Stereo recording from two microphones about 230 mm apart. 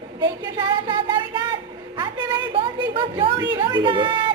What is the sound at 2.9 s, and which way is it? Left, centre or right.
Speech, right.